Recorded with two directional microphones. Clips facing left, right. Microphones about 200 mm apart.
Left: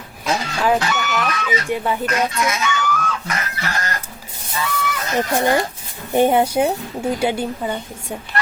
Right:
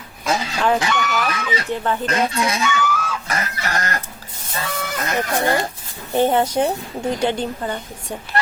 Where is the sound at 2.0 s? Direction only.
30° right (ahead or behind).